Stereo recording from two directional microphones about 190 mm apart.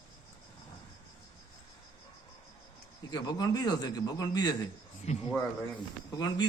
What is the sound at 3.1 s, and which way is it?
A man's voice, 20° left (ahead or behind).